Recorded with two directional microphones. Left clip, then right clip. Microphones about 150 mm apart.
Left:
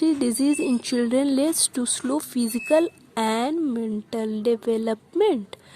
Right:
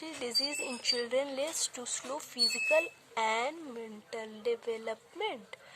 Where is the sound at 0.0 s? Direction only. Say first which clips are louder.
Left 12 dB; 40° left (ahead or behind).